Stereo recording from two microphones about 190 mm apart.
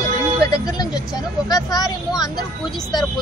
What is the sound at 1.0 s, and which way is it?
Speech, 20° left (ahead or behind).